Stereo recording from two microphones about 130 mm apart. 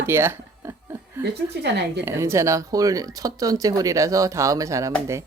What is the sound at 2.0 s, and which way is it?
Speech, 20° right (ahead or behind).